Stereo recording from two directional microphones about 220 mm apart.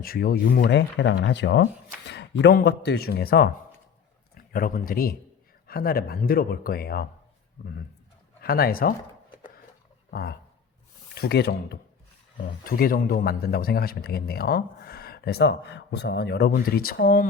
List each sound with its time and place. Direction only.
0.0 s a man's voice: 40° left (ahead or behind)
10.1 s a man's voice: 45° left (ahead or behind)